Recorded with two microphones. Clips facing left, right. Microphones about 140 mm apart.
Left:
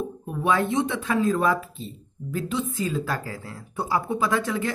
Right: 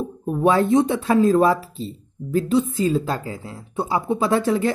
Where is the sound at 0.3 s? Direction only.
35° right (ahead or behind).